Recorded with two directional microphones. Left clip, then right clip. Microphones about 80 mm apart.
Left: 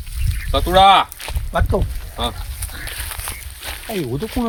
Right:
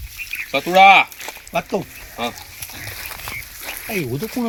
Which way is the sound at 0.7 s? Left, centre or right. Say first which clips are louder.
Right 1 dB; centre.